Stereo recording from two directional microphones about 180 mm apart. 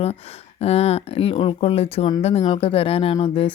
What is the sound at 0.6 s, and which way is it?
Speech, 35° left (ahead or behind).